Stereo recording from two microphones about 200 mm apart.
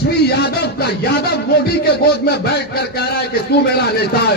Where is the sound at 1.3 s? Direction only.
55° left (ahead or behind).